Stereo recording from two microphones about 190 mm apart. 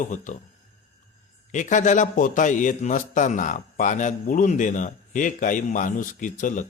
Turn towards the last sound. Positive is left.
turn(degrees=40)  # may be behind; listen again after turning